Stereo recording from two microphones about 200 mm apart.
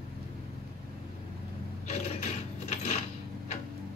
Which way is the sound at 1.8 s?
35° left (ahead or behind).